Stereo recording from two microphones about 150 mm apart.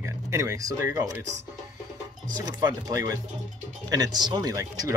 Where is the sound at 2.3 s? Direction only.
25° right (ahead or behind).